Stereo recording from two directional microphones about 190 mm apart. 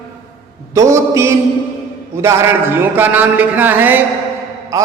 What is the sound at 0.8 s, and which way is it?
A man's voice, 15° right (ahead or behind).